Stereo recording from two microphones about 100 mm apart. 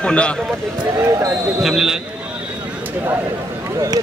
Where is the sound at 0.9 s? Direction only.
35° right (ahead or behind).